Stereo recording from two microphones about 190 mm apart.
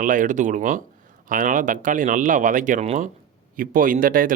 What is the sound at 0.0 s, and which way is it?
Speech, 45° right (ahead or behind).